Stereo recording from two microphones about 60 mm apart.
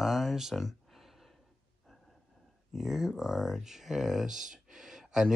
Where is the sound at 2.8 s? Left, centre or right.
Centre.